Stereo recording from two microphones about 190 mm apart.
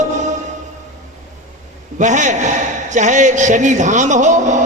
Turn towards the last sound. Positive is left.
turn(degrees=-40)  # may be behind; listen again after turning